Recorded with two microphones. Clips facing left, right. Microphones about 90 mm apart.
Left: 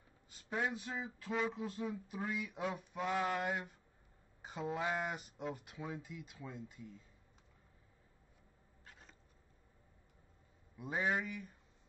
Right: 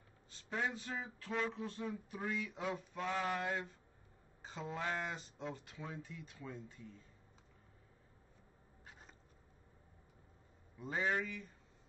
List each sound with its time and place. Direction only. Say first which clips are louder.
0.3 s speech: left 1 dB; 10° left (ahead or behind)
10.8 s speech: left 1 dB; 10° left (ahead or behind)